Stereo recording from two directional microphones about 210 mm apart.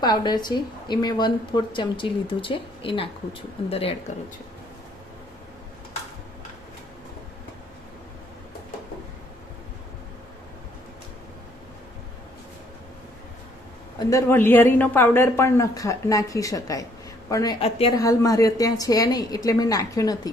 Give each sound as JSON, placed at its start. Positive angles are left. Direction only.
{"t": 0.0, "sound": "a woman's voice", "side_deg": 20}
{"t": 14.0, "sound": "a woman's voice", "side_deg": 15}